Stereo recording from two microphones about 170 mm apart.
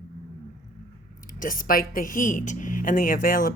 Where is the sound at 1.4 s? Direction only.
55° left (ahead or behind).